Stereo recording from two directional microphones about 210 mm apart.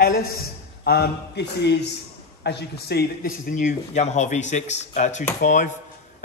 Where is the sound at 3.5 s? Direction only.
35° left (ahead or behind).